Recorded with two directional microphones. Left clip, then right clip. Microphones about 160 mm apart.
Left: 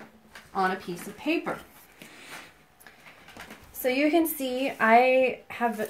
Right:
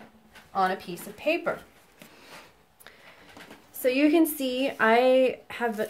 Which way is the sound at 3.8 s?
40° right (ahead or behind).